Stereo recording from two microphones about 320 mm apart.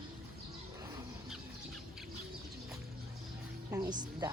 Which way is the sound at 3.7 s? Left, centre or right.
Centre.